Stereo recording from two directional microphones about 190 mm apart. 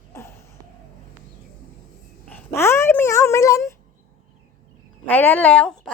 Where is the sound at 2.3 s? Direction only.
15° left (ahead or behind).